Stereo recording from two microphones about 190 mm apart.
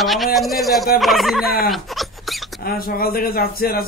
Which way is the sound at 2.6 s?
50° left (ahead or behind).